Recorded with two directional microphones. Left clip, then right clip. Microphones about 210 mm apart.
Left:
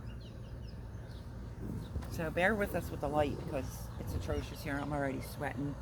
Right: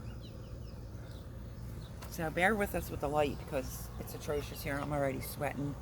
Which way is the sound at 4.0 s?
45° right (ahead or behind).